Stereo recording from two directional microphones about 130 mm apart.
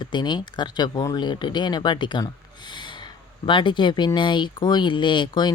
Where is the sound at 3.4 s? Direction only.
40° left (ahead or behind).